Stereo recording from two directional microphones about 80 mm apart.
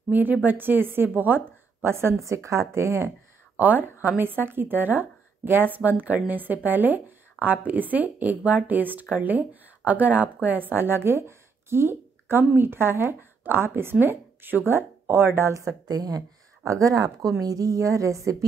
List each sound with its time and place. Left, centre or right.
0.1 s a woman's voice: right
3.5 s a woman's voice: right